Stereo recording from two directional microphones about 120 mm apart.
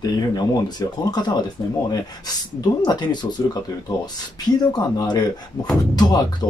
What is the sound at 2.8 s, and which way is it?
Speech, 35° left (ahead or behind).